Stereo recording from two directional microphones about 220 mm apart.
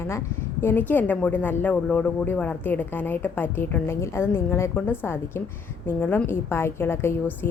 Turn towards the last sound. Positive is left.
turn(degrees=10)  # may be behind; listen again after turning